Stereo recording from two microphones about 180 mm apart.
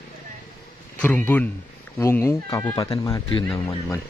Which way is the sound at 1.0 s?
10° left (ahead or behind).